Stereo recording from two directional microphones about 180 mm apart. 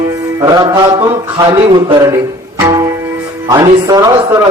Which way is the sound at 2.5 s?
15° right (ahead or behind).